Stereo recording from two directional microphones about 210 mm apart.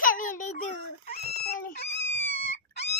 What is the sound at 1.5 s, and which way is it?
Dog, 35° left (ahead or behind).